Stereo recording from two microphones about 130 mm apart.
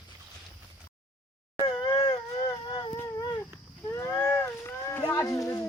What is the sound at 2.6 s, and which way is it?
Baby cry, 35° left (ahead or behind).